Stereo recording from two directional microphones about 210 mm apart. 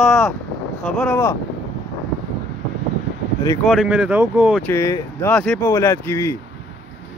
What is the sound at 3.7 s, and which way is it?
Speech, 5° right (ahead or behind).